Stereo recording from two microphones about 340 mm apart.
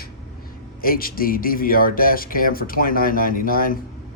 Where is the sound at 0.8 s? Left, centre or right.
Left.